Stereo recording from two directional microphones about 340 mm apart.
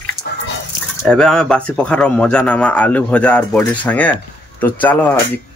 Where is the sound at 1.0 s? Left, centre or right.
Centre.